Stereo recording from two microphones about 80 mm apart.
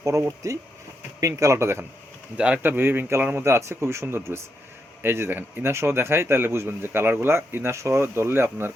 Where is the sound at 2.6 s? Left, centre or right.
Right.